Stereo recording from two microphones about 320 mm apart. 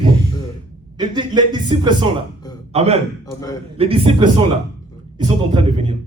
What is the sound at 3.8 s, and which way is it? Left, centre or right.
Speech, centre.